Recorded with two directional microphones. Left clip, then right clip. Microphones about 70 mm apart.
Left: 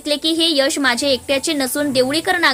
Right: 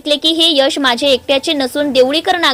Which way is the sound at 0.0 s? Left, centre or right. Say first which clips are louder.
Right 5 dB; right.